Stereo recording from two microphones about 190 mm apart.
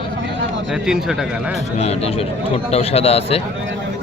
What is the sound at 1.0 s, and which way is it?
Speech, 5° right (ahead or behind).